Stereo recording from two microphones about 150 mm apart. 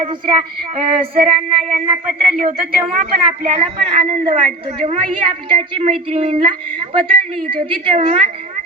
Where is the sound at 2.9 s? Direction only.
50° right (ahead or behind).